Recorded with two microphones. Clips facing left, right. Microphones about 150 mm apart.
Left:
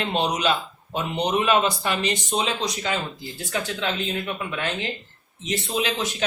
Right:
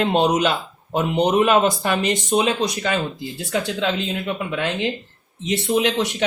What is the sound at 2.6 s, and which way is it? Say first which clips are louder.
Speech: right 4 dB; 65° right (ahead or behind).